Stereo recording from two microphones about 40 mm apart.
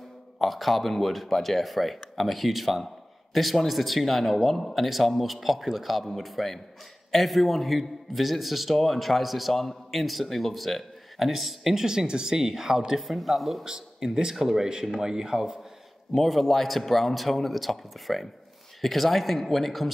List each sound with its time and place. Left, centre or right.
0.4 s a man's voice: centre
13.7 s speech: centre
16.2 s a man's voice: centre